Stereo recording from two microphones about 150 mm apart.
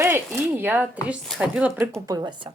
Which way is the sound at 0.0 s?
15° right (ahead or behind).